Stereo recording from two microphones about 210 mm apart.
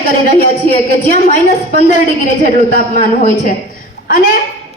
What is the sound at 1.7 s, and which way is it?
A woman's voice, 35° left (ahead or behind).